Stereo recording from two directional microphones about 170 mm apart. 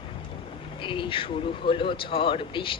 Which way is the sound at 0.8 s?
30° left (ahead or behind).